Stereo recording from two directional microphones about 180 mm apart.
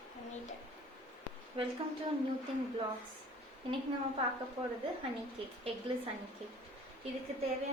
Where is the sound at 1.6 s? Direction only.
30° right (ahead or behind).